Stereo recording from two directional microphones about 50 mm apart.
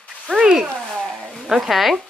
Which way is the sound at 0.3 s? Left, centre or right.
Centre.